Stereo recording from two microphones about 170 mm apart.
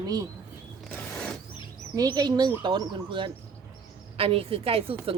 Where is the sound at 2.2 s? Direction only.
25° right (ahead or behind).